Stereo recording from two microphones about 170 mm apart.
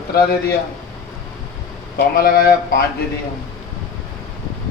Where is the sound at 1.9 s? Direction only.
60° left (ahead or behind).